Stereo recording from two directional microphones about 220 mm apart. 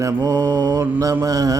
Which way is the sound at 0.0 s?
15° right (ahead or behind).